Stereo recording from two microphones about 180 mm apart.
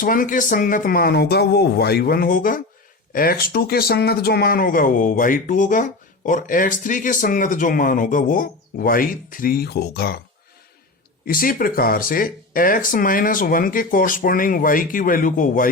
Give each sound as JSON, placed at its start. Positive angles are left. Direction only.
{"t": 0.0, "sound": "speech", "side_deg": 50}
{"t": 11.3, "sound": "speech", "side_deg": 50}